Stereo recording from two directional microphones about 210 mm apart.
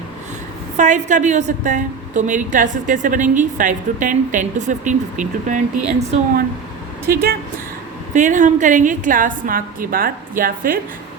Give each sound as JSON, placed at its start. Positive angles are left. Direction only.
{"t": 0.8, "sound": "a woman's voice", "side_deg": -35}
{"t": 7.1, "sound": "speech", "side_deg": -45}
{"t": 8.1, "sound": "a woman's voice", "side_deg": -35}